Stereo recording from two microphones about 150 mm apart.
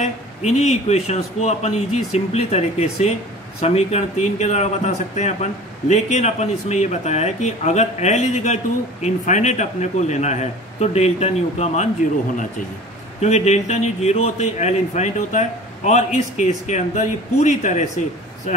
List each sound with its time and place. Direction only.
0.0 s speech: 50° left (ahead or behind)
13.2 s speech: 50° left (ahead or behind)